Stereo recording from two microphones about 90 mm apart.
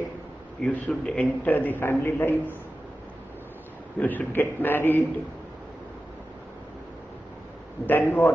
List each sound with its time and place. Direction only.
0.6 s a man's voice: 15° left (ahead or behind)
4.0 s a man's voice: 20° left (ahead or behind)
7.8 s a man's voice: 20° left (ahead or behind)